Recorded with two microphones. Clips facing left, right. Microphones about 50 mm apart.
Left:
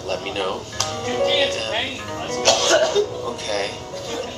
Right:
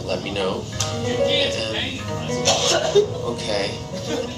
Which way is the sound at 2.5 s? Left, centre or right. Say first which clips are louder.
Left 3 dB; left.